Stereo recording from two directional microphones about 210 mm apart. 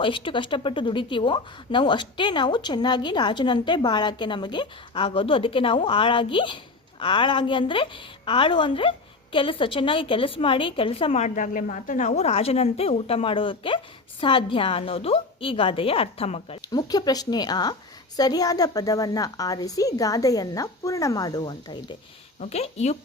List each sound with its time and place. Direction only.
0.0 s a woman's voice: 25° left (ahead or behind)
22.4 s a woman's voice: 30° left (ahead or behind)